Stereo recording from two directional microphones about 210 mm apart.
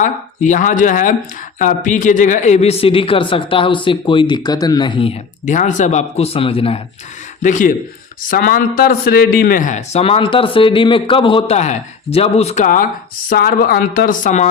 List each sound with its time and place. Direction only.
0.0 s a man's voice: 35° left (ahead or behind)
5.5 s a man's voice: 35° left (ahead or behind)
7.4 s a man's voice: 35° left (ahead or behind)